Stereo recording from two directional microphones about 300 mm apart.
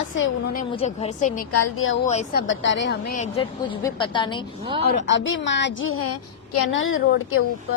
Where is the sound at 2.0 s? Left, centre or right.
Left.